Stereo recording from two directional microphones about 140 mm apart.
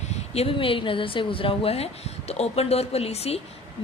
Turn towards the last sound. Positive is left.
turn(degrees=45)  # may be behind; listen again after turning